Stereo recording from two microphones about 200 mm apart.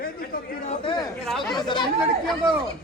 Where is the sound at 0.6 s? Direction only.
35° left (ahead or behind).